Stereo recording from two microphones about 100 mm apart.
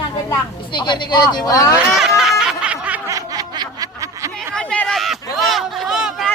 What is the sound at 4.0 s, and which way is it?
Snicker, 30° right (ahead or behind).